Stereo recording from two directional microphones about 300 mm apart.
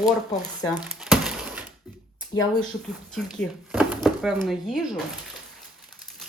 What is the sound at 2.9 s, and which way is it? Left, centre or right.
Speech, centre.